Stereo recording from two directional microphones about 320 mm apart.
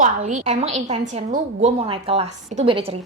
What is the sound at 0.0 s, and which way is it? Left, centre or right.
A woman's voice, right.